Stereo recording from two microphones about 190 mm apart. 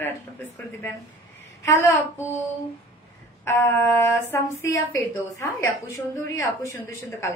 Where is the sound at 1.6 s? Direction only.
15° left (ahead or behind).